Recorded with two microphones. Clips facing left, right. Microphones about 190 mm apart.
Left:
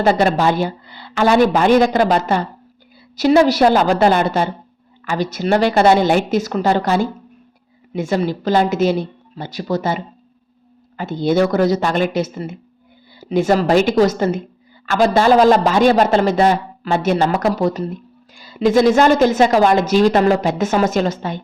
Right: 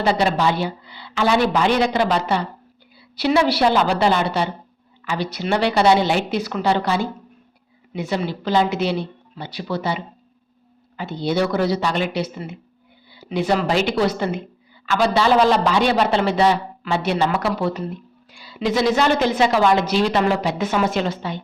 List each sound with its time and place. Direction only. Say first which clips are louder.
0.0 s a woman's voice: left 4 dB; 50° left (ahead or behind)